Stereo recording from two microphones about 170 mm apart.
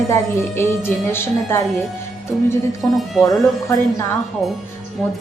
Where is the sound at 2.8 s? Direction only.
5° left (ahead or behind).